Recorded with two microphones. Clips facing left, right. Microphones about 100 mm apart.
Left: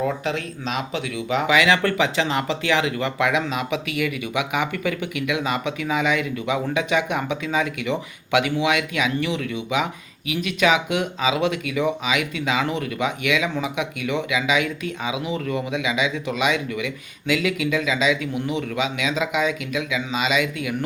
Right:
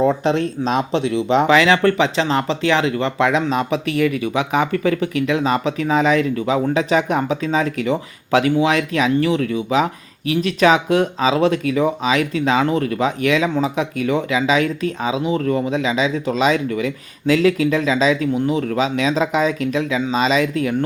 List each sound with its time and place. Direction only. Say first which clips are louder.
0.0 s speech: right 8 dB; 30° right (ahead or behind)